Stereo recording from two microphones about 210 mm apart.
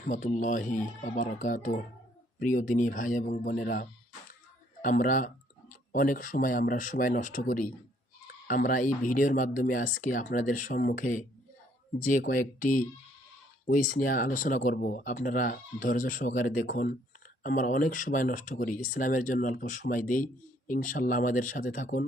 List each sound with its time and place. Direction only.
0.1 s speech: 35° left (ahead or behind)
13.9 s speech: 40° left (ahead or behind)